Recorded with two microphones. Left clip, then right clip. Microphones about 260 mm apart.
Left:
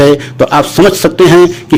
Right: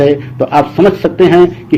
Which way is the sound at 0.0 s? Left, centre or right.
Left.